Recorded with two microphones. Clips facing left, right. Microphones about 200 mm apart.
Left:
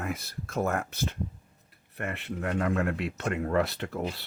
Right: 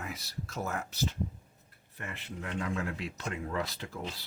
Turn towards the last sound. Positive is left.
turn(degrees=65)  # may be behind; listen again after turning